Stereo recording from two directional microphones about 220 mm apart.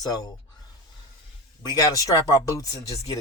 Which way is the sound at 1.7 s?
15° left (ahead or behind).